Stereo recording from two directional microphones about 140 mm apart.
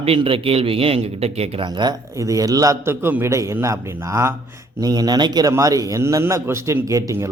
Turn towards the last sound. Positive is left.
turn(degrees=-25)  # may be behind; listen again after turning